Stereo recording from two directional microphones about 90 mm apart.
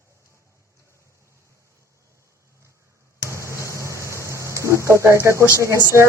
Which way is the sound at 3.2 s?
30° right (ahead or behind).